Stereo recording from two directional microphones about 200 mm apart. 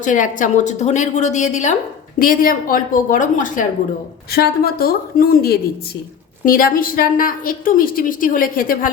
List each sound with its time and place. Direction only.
0.0 s a woman's voice: 40° left (ahead or behind)